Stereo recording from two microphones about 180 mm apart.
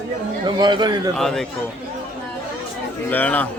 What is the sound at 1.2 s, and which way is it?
Speech, centre (ahead or behind).